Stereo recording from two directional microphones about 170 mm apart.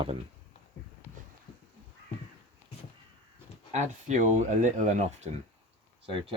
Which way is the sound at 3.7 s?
45° right (ahead or behind).